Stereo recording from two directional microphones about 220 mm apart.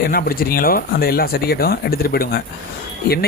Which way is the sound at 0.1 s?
40° left (ahead or behind).